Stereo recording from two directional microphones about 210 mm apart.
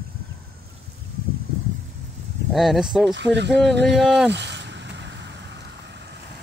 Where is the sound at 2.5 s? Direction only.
Centre (ahead or behind).